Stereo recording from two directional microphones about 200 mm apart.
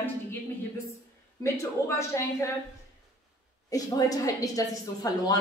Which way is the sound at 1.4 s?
15° left (ahead or behind).